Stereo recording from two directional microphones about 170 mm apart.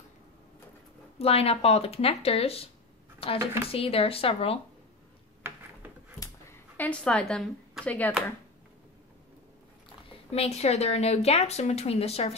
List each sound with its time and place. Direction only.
1.1 s speech: 35° left (ahead or behind)
5.4 s a sound: 10° right (ahead or behind)
6.8 s a woman's voice: 5° left (ahead or behind)
10.3 s speech: 35° left (ahead or behind)